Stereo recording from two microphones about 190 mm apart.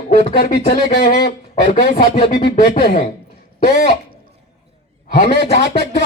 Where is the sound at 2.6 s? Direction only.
50° left (ahead or behind).